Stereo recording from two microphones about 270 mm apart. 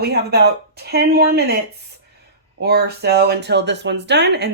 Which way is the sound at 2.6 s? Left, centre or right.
Right.